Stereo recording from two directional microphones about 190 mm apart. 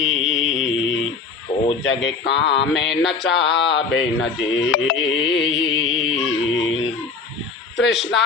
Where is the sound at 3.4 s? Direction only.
70° left (ahead or behind).